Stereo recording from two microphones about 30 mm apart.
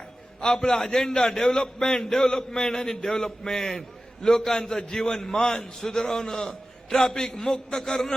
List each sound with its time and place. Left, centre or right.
0.3 s a man's voice: left